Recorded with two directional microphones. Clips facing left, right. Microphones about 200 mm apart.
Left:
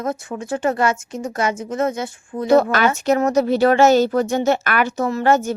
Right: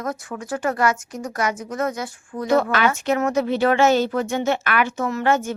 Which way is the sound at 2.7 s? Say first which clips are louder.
Left 3 dB; 40° left (ahead or behind).